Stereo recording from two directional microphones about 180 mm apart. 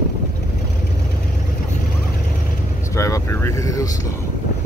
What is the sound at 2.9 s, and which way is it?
Vehicle, 15° left (ahead or behind).